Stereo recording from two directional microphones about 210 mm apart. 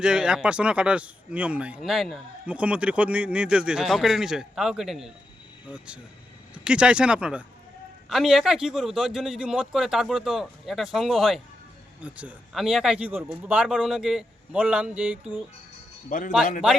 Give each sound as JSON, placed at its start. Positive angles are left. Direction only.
{"t": 0.0, "sound": "speech", "side_deg": -5}
{"t": 16.0, "sound": "a man's voice", "side_deg": 40}